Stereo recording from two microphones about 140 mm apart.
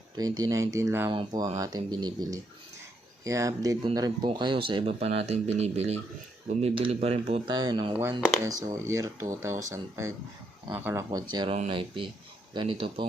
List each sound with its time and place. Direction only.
0.2 s speech: 25° right (ahead or behind)
1.1 s speech: 30° right (ahead or behind)
7.7 s speech: 35° right (ahead or behind)
8.4 s speech: 25° right (ahead or behind)
11.3 s speech: 30° right (ahead or behind)